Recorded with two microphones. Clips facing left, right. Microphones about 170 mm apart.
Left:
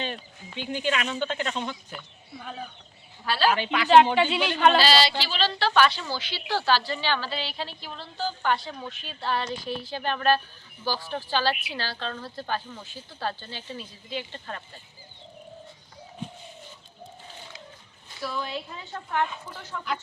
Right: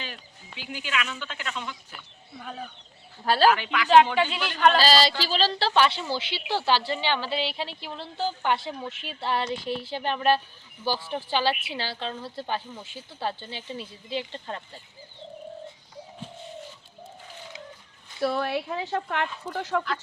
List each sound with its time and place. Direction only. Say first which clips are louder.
0.7 s speech: left 4 dB; 35° left (ahead or behind)
2.0 s speech: left 2 dB; centre (ahead or behind)
3.2 s speech: right 4 dB; 40° right (ahead or behind)
3.5 s a woman's voice: even; 30° left (ahead or behind)
4.1 s speech: left 3 dB; 5° left (ahead or behind)
4.8 s a woman's voice: right 1 dB; 40° right (ahead or behind); by 14.6 s 25° right (ahead or behind)
18.2 s speech: right 6 dB; 65° right (ahead or behind); by 19.8 s 85° right